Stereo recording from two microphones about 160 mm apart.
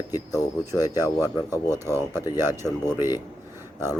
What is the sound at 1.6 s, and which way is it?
Speech, 15° right (ahead or behind).